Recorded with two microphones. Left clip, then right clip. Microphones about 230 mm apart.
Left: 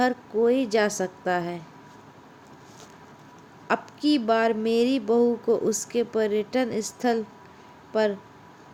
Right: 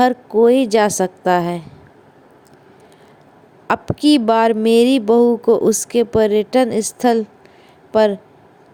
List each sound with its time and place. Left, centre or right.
0.0 s speech: right
3.7 s speech: right